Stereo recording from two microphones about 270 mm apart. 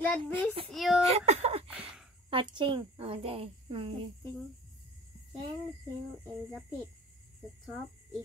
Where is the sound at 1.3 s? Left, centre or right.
Right.